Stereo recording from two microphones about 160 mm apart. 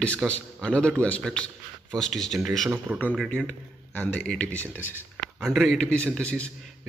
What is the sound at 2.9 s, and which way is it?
Speech, centre (ahead or behind).